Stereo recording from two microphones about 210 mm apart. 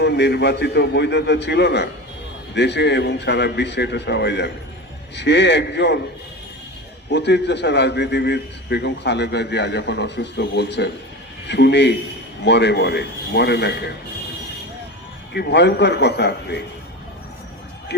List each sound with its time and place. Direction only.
0.0 s a man's voice: 55° left (ahead or behind)
7.1 s a man's voice: 55° left (ahead or behind)
15.3 s speech: 50° left (ahead or behind)